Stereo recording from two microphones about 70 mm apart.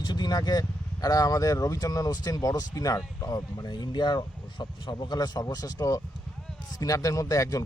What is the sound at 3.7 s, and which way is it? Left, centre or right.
Speech, left.